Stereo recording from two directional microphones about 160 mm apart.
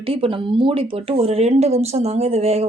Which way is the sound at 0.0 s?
35° right (ahead or behind).